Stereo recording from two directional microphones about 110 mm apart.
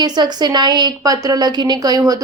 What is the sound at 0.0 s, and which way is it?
A woman's voice, 40° right (ahead or behind).